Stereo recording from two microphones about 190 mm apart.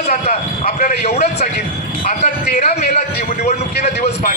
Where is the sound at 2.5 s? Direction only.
35° left (ahead or behind).